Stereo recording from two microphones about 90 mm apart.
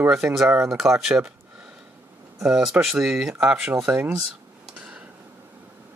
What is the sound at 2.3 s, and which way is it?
Speech, 5° right (ahead or behind).